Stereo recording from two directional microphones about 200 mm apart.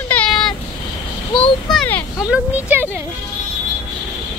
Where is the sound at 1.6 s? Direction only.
5° left (ahead or behind).